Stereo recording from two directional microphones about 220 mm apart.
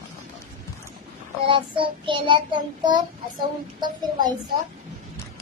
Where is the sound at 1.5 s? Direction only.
20° right (ahead or behind).